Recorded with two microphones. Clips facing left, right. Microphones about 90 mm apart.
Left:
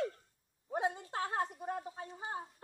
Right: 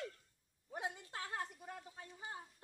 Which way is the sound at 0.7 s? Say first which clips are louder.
Left 9 dB; 30° left (ahead or behind).